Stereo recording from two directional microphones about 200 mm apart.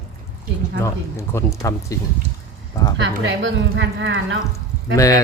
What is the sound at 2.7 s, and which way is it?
Speech, 20° left (ahead or behind).